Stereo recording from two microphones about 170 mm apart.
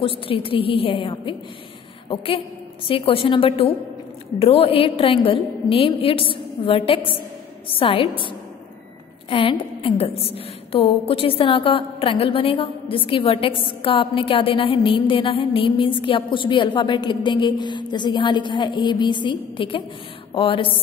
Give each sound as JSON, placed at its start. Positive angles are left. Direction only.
{"t": 0.0, "sound": "a woman's voice", "side_deg": 30}